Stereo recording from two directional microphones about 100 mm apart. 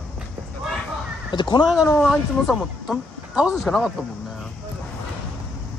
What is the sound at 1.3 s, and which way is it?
Speech, 50° left (ahead or behind).